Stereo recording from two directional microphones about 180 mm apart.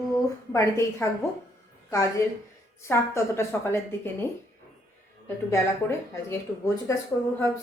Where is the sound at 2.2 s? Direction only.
15° left (ahead or behind).